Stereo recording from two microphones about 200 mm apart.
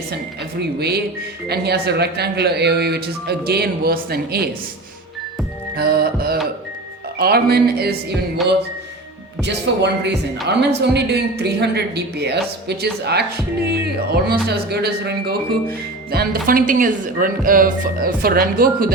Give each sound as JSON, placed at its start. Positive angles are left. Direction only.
{"t": 0.6, "sound": "speech", "side_deg": -55}
{"t": 5.7, "sound": "speech", "side_deg": -50}
{"t": 9.4, "sound": "a woman's voice", "side_deg": -60}
{"t": 14.3, "sound": "speech", "side_deg": -50}